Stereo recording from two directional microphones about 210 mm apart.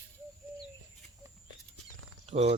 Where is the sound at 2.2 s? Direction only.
30° right (ahead or behind).